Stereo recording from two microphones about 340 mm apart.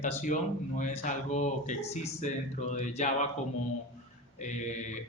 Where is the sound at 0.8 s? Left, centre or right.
Left.